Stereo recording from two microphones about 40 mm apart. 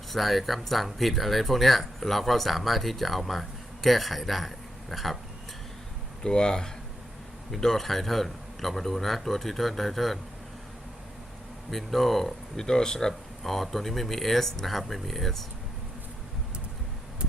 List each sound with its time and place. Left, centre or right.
0.1 s speech: centre
6.2 s speech: centre
7.5 s speech: centre
11.7 s speech: centre
12.5 s speech: centre